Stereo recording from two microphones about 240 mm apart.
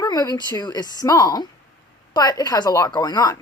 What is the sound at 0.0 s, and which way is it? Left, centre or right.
Speech, centre.